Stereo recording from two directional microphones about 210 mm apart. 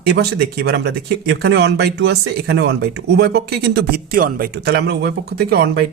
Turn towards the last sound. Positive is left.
turn(degrees=-45)  # may be behind; listen again after turning